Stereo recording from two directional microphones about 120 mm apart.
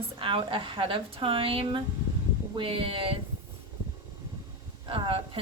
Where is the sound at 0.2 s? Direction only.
45° right (ahead or behind).